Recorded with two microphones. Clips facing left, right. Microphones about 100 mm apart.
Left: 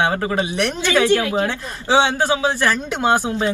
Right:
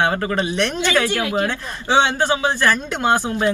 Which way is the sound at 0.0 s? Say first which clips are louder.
Even; 15° left (ahead or behind).